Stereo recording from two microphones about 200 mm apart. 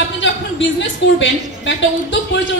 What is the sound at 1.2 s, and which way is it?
A woman's voice, 65° left (ahead or behind).